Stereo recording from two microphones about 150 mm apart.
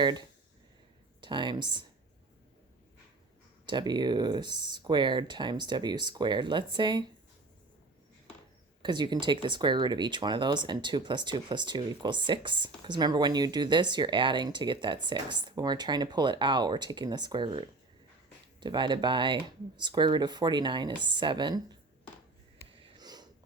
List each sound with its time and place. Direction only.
0.0 s speech: 30° right (ahead or behind)
3.7 s speech: 30° right (ahead or behind)
8.8 s speech: 30° right (ahead or behind)
23.0 s wheeze: 25° right (ahead or behind)